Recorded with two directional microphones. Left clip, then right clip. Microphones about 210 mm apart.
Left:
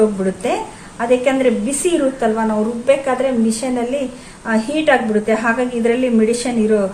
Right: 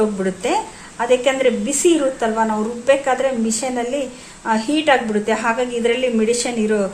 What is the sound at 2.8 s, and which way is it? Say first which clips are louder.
A woman's voice: even; 35° right (ahead or behind).